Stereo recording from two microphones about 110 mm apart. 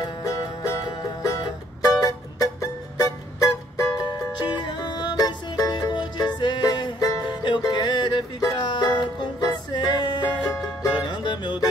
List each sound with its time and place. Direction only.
0.0 s music: 30° left (ahead or behind)
1.8 s music: 30° left (ahead or behind)
4.4 s music: 40° left (ahead or behind)
7.2 s music: 45° left (ahead or behind)